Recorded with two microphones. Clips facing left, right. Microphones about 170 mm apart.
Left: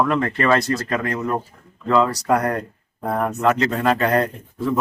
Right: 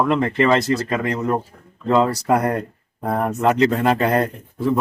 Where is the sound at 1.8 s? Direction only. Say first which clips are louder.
Right 1 dB; 20° right (ahead or behind).